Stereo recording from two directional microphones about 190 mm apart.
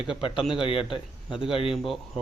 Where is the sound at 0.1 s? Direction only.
25° left (ahead or behind).